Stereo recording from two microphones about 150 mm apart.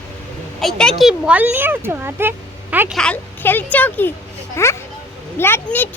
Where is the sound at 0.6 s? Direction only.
5° left (ahead or behind); by 2.9 s 15° right (ahead or behind).